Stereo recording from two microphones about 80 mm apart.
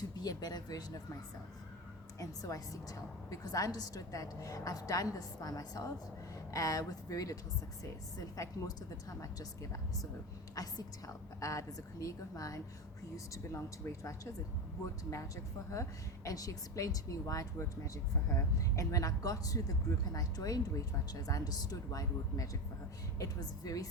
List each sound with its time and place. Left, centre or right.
0.2 s speech: left
2.1 s a woman's voice: left
8.4 s a woman's voice: left
10.5 s a woman's voice: left
15.7 s a woman's voice: left